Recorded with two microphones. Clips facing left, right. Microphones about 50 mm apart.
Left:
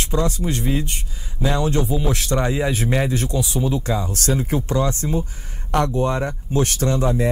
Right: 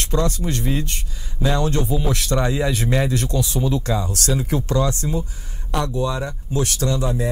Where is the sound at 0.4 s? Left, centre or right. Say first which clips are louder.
Left 1 dB; left.